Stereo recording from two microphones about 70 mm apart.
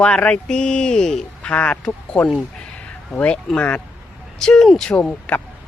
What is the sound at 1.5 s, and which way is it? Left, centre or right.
Speech, centre.